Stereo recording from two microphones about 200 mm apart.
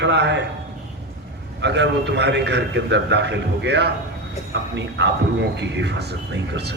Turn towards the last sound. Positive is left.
turn(degrees=-55)  # may be behind; listen again after turning